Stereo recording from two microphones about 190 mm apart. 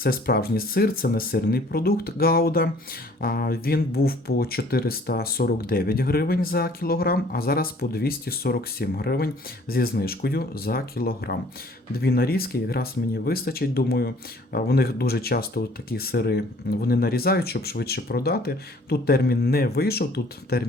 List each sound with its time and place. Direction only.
0.0 s speech: 50° left (ahead or behind)